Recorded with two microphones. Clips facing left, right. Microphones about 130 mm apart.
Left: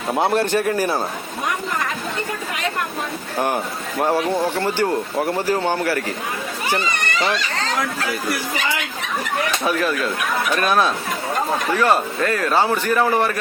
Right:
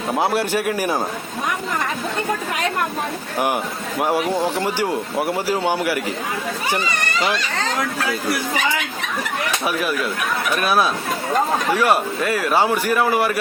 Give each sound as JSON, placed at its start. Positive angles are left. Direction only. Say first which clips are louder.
{"t": 0.1, "sound": "speech", "louder": "left 2 dB", "side_deg": 0}
{"t": 3.3, "sound": "speech", "louder": "even", "side_deg": -15}
{"t": 9.6, "sound": "speech", "louder": "left 1 dB", "side_deg": -10}